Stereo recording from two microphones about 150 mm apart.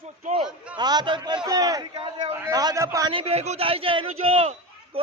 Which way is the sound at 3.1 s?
40° right (ahead or behind).